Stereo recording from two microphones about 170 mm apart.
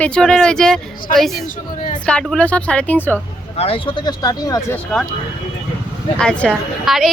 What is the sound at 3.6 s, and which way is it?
Speech, 30° left (ahead or behind).